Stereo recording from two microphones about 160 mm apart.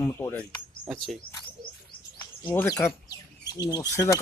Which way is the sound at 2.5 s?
15° left (ahead or behind).